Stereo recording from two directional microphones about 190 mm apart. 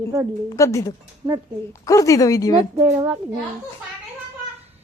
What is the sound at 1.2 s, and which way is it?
Speech, 20° right (ahead or behind).